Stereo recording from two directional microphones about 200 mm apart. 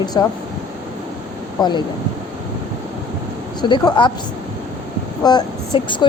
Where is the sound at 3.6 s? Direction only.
20° left (ahead or behind).